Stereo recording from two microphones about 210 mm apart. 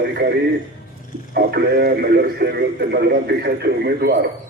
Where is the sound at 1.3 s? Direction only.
50° right (ahead or behind).